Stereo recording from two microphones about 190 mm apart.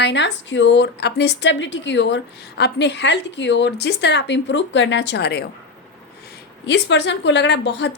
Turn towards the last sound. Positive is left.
turn(degrees=65)  # may be behind; listen again after turning